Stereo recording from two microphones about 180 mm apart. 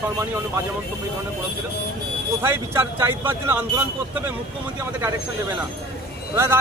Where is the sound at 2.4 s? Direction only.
15° right (ahead or behind).